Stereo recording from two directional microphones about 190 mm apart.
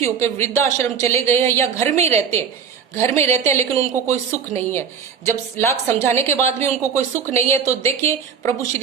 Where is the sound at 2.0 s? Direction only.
35° right (ahead or behind).